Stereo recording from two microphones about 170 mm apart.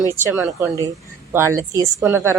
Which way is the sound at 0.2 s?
10° right (ahead or behind).